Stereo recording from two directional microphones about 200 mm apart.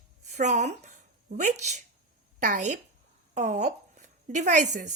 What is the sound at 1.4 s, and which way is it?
A woman's voice, 35° right (ahead or behind).